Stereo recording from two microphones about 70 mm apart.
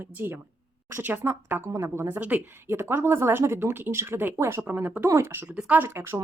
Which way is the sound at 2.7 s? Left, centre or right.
Right.